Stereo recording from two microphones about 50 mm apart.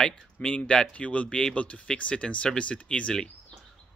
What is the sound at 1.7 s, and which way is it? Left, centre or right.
Speech, left.